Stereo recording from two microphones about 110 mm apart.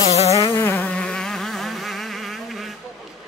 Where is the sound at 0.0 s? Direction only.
70° left (ahead or behind).